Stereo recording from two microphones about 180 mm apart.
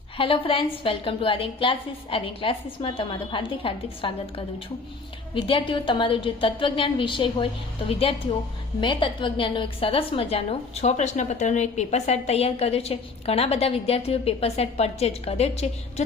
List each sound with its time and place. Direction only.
0.2 s a woman's voice: 30° left (ahead or behind)